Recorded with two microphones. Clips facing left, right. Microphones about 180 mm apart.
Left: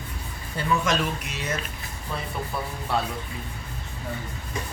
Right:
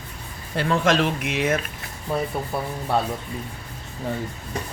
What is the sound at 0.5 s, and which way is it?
Speech, 65° right (ahead or behind).